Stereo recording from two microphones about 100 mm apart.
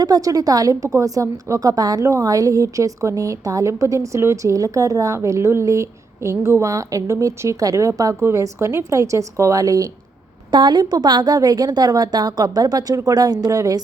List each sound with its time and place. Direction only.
0.0 s a woman's voice: 40° right (ahead or behind)
10.5 s a woman's voice: 50° right (ahead or behind)